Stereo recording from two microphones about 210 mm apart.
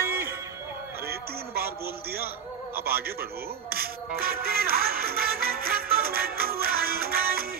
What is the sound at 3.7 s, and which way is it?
Music, 45° right (ahead or behind).